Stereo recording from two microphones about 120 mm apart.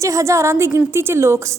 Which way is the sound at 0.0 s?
25° right (ahead or behind).